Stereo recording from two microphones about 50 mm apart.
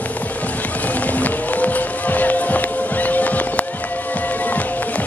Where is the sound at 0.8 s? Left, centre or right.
Left.